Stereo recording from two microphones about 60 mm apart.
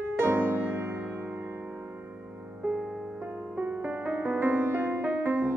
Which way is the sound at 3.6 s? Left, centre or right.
Right.